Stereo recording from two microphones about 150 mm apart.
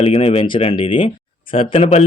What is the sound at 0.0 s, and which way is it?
Speech, 40° left (ahead or behind).